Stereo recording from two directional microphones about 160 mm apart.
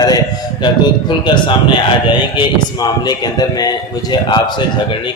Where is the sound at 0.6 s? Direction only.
30° left (ahead or behind).